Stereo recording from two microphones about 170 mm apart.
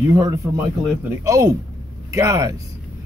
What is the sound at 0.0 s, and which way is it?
Speech, 20° right (ahead or behind).